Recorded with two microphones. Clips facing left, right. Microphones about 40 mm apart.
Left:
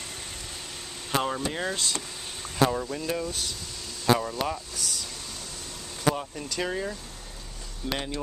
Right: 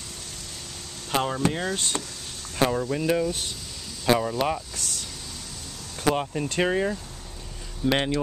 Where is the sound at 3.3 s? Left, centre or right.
Right.